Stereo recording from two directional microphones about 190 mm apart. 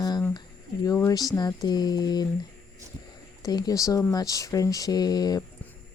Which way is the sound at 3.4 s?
20° left (ahead or behind).